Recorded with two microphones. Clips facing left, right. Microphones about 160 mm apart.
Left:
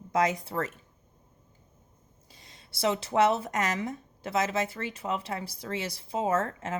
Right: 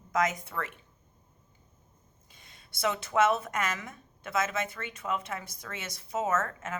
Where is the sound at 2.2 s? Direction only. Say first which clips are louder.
Left 3 dB; 35° left (ahead or behind).